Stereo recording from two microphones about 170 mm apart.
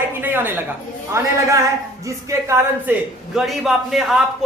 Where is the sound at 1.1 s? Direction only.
15° right (ahead or behind).